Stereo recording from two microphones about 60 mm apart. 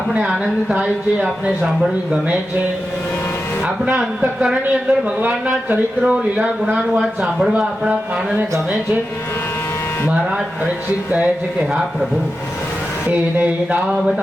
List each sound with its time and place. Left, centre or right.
0.1 s speech: centre
4.6 s a man's voice: right
11.7 s speech: centre
13.1 s a man's voice: right
13.9 s speech: centre